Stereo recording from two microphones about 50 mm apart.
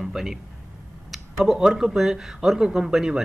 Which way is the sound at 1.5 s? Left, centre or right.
Centre.